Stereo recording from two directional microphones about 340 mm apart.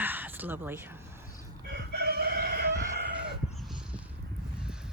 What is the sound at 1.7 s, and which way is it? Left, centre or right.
Chicken, right.